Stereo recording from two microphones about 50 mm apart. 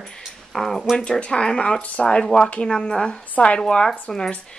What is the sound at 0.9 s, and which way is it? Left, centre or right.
Speech, centre.